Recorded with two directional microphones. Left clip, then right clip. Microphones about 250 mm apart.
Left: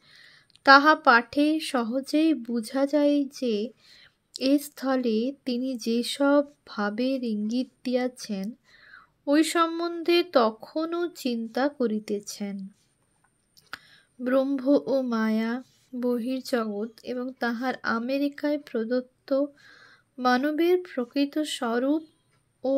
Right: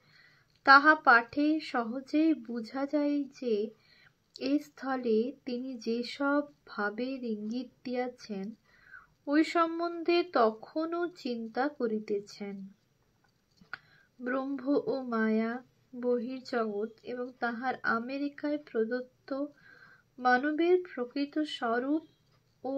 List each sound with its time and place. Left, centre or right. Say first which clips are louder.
0.1 s speech: left 9 dB; left
13.7 s speech: left 3 dB; left